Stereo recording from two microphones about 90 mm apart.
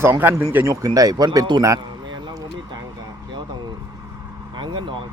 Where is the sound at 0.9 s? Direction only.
45° right (ahead or behind).